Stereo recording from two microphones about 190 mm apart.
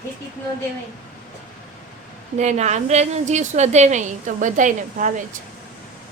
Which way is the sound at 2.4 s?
35° right (ahead or behind).